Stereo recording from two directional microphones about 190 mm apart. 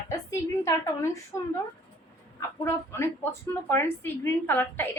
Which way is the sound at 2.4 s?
15° left (ahead or behind).